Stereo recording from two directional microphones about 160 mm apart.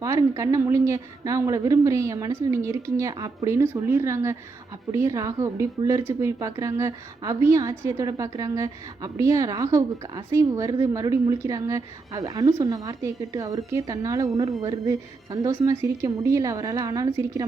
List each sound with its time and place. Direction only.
0.0 s a woman's voice: 20° right (ahead or behind)